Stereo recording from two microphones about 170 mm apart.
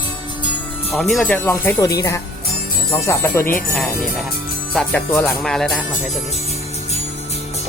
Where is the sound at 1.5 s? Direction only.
15° left (ahead or behind).